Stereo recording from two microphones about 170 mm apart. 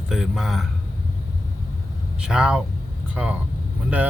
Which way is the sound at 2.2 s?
5° right (ahead or behind).